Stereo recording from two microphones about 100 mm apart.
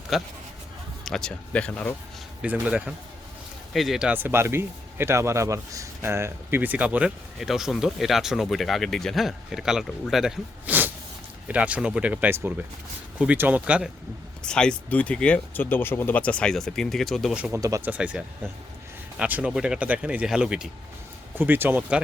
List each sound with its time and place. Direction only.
0.1 s speech: centre (ahead or behind)
2.4 s speech: 15° right (ahead or behind)
3.7 s speech: centre (ahead or behind)
4.1 s speech: 20° right (ahead or behind)
7.3 s speech: 5° right (ahead or behind)
10.7 s a sound: 20° right (ahead or behind)
11.4 s speech: 15° right (ahead or behind)
14.4 s speech: 10° left (ahead or behind)
17.5 s speech: 30° right (ahead or behind)
17.8 s speech: 15° right (ahead or behind)
19.2 s speech: 10° right (ahead or behind)
21.3 s speech: 20° right (ahead or behind)